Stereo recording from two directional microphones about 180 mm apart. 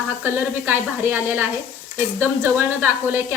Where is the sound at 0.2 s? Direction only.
10° right (ahead or behind).